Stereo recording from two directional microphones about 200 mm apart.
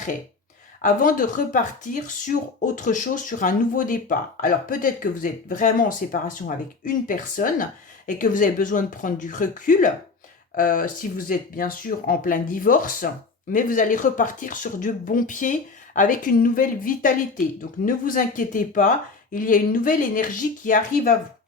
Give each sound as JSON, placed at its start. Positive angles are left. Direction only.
{"t": 0.8, "sound": "speech", "side_deg": 40}